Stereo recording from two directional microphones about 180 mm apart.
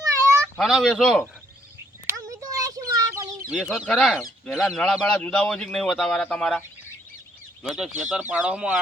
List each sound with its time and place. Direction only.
0.0 s cat: 15° right (ahead or behind)
0.6 s speech: centre (ahead or behind)
2.0 s a sound: 15° right (ahead or behind)
3.5 s speech: centre (ahead or behind)
8.1 s speech: 5° right (ahead or behind)